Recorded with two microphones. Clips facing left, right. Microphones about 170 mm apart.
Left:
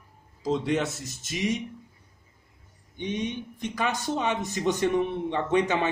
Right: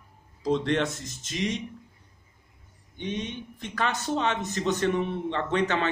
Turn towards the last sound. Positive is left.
turn(degrees=15)  # may be behind; listen again after turning